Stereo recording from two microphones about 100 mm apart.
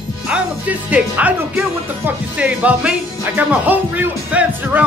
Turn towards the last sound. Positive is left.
turn(degrees=-15)  # may be behind; listen again after turning